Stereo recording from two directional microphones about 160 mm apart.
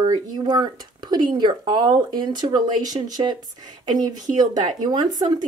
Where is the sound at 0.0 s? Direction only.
25° right (ahead or behind).